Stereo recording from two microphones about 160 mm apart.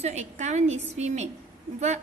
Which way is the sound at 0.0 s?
45° right (ahead or behind).